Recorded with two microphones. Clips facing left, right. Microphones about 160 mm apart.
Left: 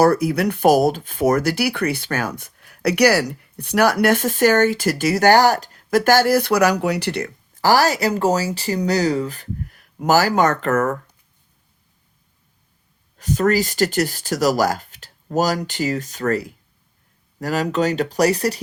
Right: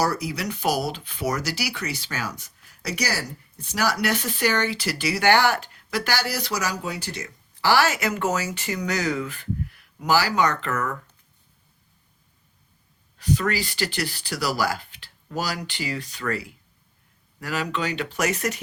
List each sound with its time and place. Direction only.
0.0 s speech: 55° left (ahead or behind)
7.5 s speech: 40° left (ahead or behind)
13.1 s speech: 45° left (ahead or behind)